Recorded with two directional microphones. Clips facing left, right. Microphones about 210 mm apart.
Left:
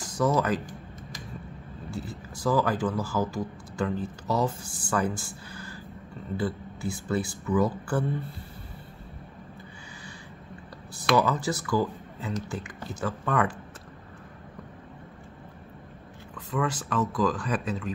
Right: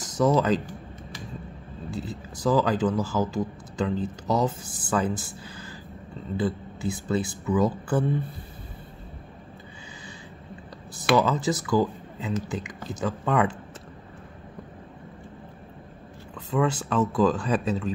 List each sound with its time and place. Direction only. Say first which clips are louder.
0.0 s speech: right 3 dB; 25° right (ahead or behind)
1.9 s speech: right 3 dB; 20° right (ahead or behind)
11.1 s speech: right 2 dB; 20° right (ahead or behind)
16.3 s speech: right 4 dB; 25° right (ahead or behind)